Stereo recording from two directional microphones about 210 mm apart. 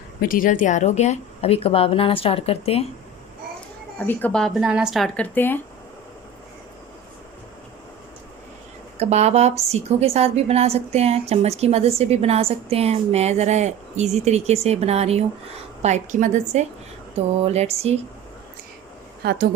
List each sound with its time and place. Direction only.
0.2 s a woman's voice: 40° left (ahead or behind)
3.9 s speech: 10° left (ahead or behind)
9.0 s a woman's voice: 30° right (ahead or behind)
17.2 s a sound: 30° right (ahead or behind)
19.2 s speech: 50° right (ahead or behind)